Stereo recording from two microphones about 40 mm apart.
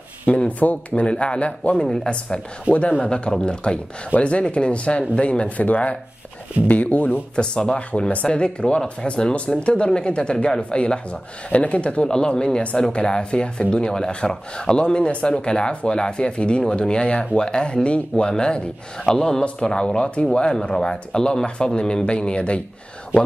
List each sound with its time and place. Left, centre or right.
0.5 s speech: left
1.0 s speech: left
5.6 s speech: left
7.3 s speech: left
12.1 s speech: centre